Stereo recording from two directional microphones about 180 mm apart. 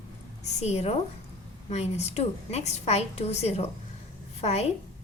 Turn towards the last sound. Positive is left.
turn(degrees=35)  # may be behind; listen again after turning